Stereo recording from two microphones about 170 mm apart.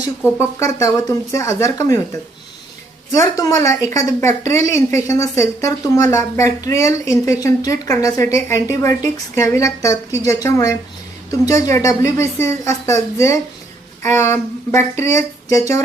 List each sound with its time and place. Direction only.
0.2 s a woman's voice: 15° left (ahead or behind)
3.1 s a woman's voice: 20° left (ahead or behind)